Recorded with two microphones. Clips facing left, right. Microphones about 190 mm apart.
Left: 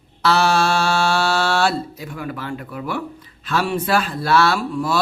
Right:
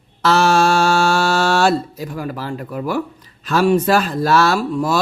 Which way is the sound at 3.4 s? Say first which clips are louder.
Right 7 dB; 45° right (ahead or behind).